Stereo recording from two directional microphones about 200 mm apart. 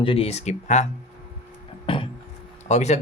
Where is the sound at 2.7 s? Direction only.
35° left (ahead or behind).